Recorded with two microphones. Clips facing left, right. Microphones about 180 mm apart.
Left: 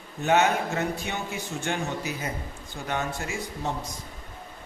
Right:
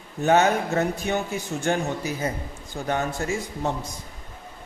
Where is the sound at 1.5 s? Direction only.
45° right (ahead or behind).